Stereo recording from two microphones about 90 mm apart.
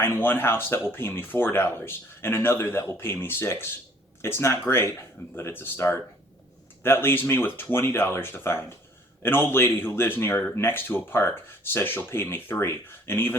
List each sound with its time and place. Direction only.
0.0 s a man's voice: 25° left (ahead or behind)